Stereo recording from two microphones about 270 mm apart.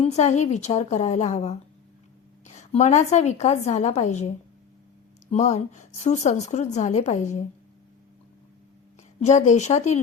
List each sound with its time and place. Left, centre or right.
0.0 s a woman's voice: left
5.3 s a woman's voice: left
9.2 s a woman's voice: left